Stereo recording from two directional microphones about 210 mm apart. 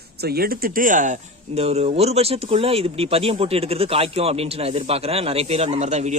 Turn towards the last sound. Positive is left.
turn(degrees=-30)  # may be behind; listen again after turning